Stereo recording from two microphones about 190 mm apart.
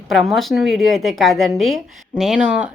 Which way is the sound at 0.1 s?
Centre (ahead or behind).